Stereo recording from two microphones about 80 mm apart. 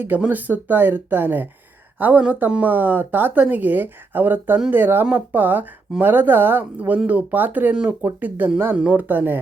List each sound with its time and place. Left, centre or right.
0.2 s speech: right